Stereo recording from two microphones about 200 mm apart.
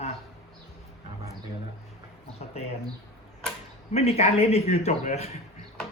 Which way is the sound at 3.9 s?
30° left (ahead or behind).